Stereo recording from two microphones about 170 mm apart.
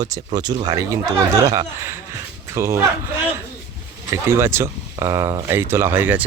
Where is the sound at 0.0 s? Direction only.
25° right (ahead or behind).